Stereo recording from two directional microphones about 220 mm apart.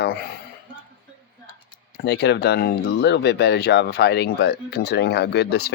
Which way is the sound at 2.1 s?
50° left (ahead or behind).